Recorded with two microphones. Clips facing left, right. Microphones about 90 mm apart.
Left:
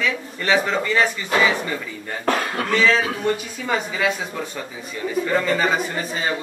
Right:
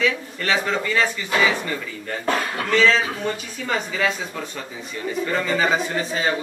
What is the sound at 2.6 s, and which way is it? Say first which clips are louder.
A man's voice: right 1 dB; 5° left (ahead or behind).